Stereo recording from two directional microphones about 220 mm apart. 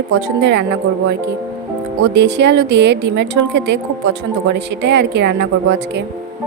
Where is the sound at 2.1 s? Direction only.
50° right (ahead or behind).